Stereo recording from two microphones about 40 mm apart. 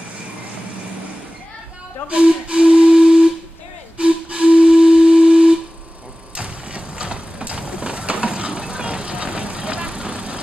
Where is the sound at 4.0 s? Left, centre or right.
Right.